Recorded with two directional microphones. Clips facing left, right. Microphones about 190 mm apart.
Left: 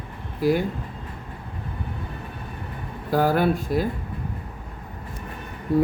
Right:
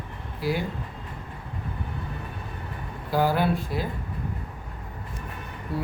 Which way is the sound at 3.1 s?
50° left (ahead or behind).